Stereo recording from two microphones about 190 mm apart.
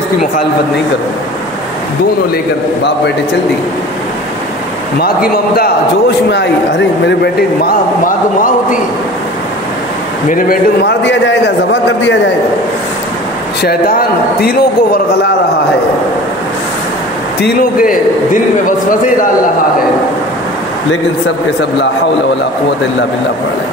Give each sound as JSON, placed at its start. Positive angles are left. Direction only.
{"t": 5.0, "sound": "a man's voice", "side_deg": 50}
{"t": 7.6, "sound": "a man's voice", "side_deg": 45}
{"t": 10.3, "sound": "a man's voice", "side_deg": 55}
{"t": 13.6, "sound": "a man's voice", "side_deg": 50}